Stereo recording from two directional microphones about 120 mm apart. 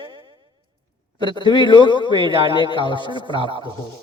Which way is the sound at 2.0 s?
40° right (ahead or behind).